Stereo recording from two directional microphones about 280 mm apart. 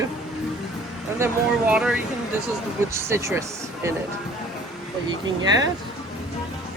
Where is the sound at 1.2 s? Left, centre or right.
Centre.